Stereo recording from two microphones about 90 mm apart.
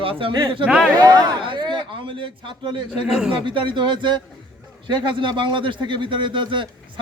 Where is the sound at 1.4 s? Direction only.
60° right (ahead or behind).